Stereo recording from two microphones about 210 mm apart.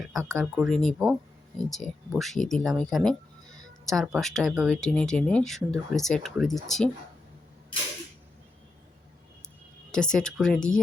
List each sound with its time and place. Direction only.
0.0 s a sound: centre (ahead or behind)
0.3 s speech: centre (ahead or behind)
9.9 s speech: 5° left (ahead or behind)